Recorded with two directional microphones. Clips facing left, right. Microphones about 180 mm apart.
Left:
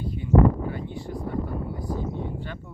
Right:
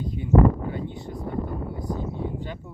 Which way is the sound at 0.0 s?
20° right (ahead or behind).